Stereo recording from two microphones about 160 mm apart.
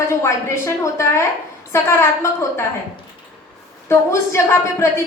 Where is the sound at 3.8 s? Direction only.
15° left (ahead or behind).